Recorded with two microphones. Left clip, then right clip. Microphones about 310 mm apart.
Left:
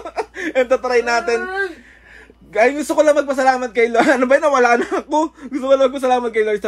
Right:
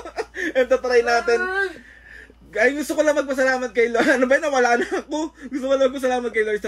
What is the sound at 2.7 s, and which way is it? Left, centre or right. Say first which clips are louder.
Speech: left 4 dB; left.